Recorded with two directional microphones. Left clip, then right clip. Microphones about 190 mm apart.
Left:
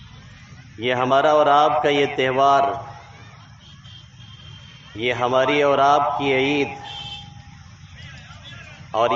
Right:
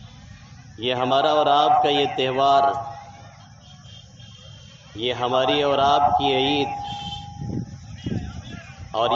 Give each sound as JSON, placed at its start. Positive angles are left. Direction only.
{"t": 0.8, "sound": "a man's voice", "side_deg": 10}
{"t": 4.9, "sound": "a man's voice", "side_deg": 15}
{"t": 8.9, "sound": "speech", "side_deg": 15}